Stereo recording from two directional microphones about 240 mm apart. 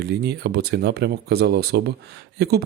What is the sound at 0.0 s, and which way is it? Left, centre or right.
A man's voice, right.